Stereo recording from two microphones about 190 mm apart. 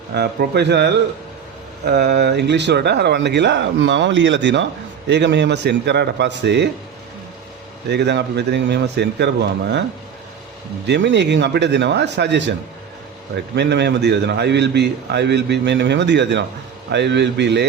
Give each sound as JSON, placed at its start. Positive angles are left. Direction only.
{"t": 0.1, "sound": "a man's voice", "side_deg": -60}
{"t": 7.9, "sound": "a man's voice", "side_deg": -60}
{"t": 10.8, "sound": "a man's voice", "side_deg": -70}